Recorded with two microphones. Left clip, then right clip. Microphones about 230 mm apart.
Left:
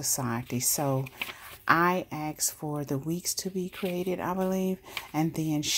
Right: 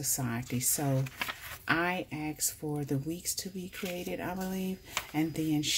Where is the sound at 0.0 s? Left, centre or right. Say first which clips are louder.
Left 4 dB; left.